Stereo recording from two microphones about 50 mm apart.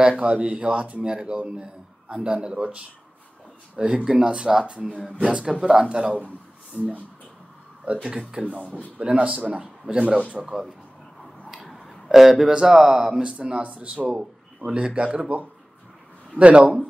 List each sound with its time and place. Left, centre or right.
0.2 s speech: right
6.7 s speech: left
8.3 s speech: centre
10.4 s speech: centre
11.6 s a sound: centre
12.1 s speech: centre; by 16.7 s right